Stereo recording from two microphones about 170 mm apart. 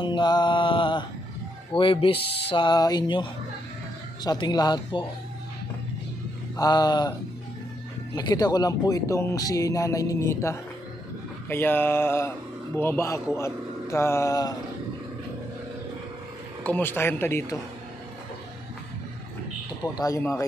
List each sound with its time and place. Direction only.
0.0 s mantra: 25° left (ahead or behind)
1.7 s speech: 30° left (ahead or behind)
6.5 s speech: 25° left (ahead or behind)
16.6 s speech: 10° left (ahead or behind)
19.8 s speech: 20° left (ahead or behind)